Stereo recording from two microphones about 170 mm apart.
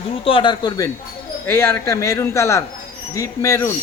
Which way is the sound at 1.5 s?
15° left (ahead or behind).